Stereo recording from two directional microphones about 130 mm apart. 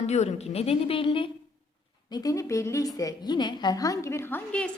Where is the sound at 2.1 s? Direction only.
30° left (ahead or behind).